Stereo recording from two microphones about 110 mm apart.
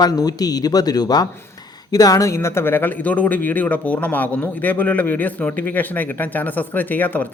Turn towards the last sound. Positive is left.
turn(degrees=15)  # may be behind; listen again after turning